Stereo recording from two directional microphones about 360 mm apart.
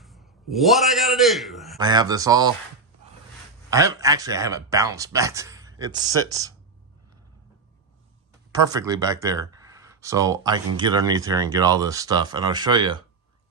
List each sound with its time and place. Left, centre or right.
0.0 s a sound: centre
1.8 s speech: centre
3.7 s speech: centre
8.5 s speech: centre